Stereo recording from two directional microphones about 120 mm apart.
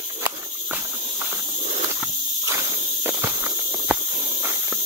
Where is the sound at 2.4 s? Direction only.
25° right (ahead or behind).